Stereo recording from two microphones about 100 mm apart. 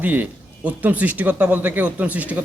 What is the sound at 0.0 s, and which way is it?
Speech, 15° right (ahead or behind).